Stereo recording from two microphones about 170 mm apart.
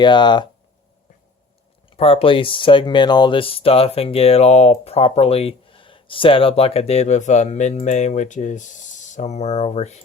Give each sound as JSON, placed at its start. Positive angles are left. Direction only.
{"t": 0.0, "sound": "speech", "side_deg": 25}
{"t": 2.0, "sound": "speech", "side_deg": 35}